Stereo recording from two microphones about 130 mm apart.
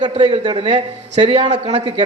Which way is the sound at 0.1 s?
40° right (ahead or behind).